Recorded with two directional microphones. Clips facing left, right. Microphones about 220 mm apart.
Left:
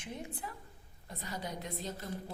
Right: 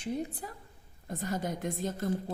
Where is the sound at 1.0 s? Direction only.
45° right (ahead or behind).